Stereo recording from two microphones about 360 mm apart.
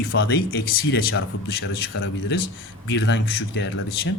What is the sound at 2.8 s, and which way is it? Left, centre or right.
Speech, left.